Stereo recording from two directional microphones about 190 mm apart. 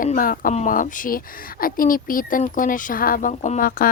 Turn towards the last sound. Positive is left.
turn(degrees=45)  # may be behind; listen again after turning